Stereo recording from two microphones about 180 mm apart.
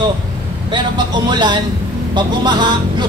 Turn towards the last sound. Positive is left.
turn(degrees=-25)  # may be behind; listen again after turning